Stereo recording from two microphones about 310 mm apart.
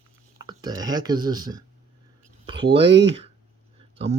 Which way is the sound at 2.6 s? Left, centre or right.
Right.